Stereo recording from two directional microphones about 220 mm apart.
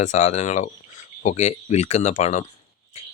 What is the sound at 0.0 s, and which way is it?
Speech, 30° left (ahead or behind).